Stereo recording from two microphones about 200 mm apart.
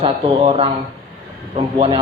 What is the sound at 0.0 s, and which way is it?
Speech, 30° right (ahead or behind).